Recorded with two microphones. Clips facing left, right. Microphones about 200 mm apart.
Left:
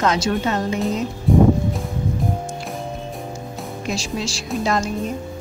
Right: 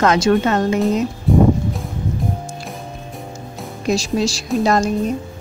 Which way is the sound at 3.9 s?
40° right (ahead or behind).